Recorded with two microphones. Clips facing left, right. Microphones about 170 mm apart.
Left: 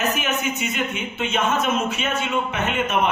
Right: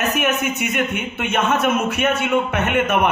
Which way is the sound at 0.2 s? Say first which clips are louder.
Right 4 dB; 65° right (ahead or behind).